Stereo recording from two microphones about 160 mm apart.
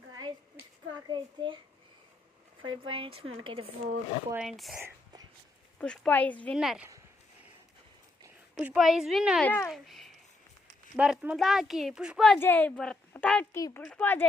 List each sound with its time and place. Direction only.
0.1 s a sound: 25° right (ahead or behind)
1.0 s a child's voice: 30° right (ahead or behind)
2.6 s speech: 30° right (ahead or behind)
4.4 s speech: centre (ahead or behind)
5.8 s speech: 5° left (ahead or behind)
6.6 s speech: 5° right (ahead or behind)
8.5 s speech: 5° right (ahead or behind)
9.4 s speech: 10° left (ahead or behind)
13.6 s speech: 20° left (ahead or behind)
13.8 s speech: 10° left (ahead or behind)